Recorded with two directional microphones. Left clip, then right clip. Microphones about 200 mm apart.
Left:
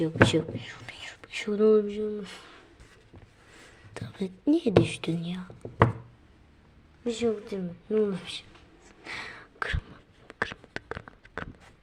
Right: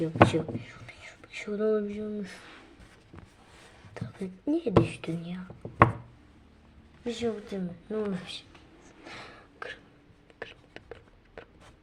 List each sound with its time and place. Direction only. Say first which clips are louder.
0.0 s speech: even; 35° left (ahead or behind)
3.9 s speech: left 4 dB; 35° left (ahead or behind)
7.0 s speech: left 4 dB; 20° left (ahead or behind)
9.0 s a sound: left 7 dB; 30° left (ahead or behind)